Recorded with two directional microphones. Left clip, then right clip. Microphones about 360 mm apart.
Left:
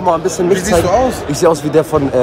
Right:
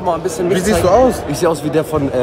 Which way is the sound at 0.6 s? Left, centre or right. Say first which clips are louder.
Right 4 dB; centre.